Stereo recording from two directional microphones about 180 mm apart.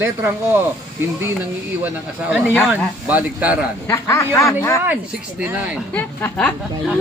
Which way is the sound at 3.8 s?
15° left (ahead or behind).